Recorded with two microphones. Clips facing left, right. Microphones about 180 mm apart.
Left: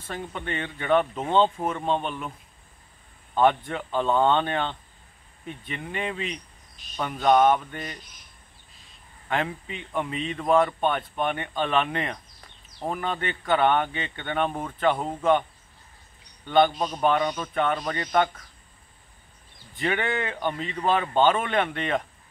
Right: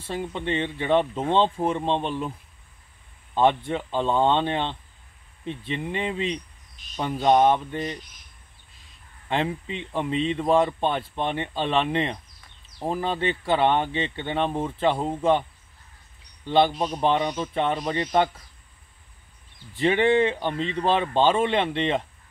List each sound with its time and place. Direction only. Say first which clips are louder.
0.0 s speech: right 4 dB; 25° right (ahead or behind)
3.3 s speech: right 1 dB; 25° right (ahead or behind)
9.3 s speech: right 2 dB; 30° right (ahead or behind)
16.4 s speech: even; 25° right (ahead or behind)
19.8 s speech: right 7 dB; 30° right (ahead or behind)